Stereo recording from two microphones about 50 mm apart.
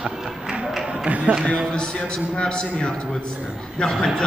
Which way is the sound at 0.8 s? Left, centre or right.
Right.